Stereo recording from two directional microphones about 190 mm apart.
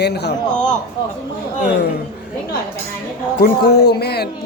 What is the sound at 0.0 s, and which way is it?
Speech, 60° left (ahead or behind).